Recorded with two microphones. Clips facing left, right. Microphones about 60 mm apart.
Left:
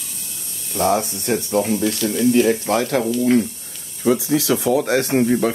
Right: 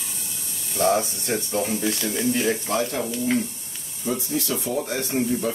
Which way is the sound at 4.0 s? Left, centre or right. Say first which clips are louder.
Left 9 dB; left.